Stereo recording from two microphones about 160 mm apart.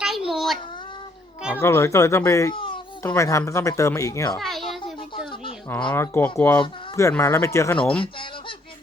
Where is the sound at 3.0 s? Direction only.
20° left (ahead or behind).